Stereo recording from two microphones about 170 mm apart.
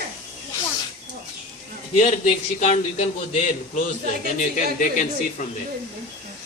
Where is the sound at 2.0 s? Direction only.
45° left (ahead or behind).